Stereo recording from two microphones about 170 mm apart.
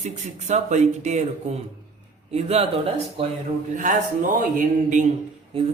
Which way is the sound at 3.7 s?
50° right (ahead or behind).